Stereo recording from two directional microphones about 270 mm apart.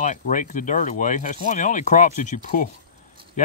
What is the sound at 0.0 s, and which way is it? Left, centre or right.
Speech, left.